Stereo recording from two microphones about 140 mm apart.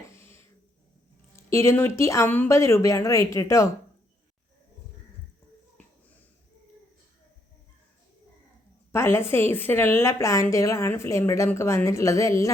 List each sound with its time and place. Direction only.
0.1 s a sound: 20° left (ahead or behind)
1.4 s a woman's voice: 20° left (ahead or behind)
8.9 s a woman's voice: 20° left (ahead or behind)